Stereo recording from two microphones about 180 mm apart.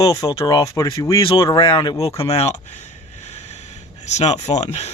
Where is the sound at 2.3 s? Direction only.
35° left (ahead or behind).